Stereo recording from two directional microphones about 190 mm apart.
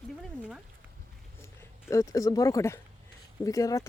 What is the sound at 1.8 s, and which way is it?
Speech, 15° left (ahead or behind).